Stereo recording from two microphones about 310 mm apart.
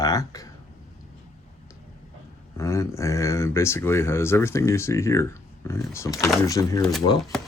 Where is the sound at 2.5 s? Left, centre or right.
Centre.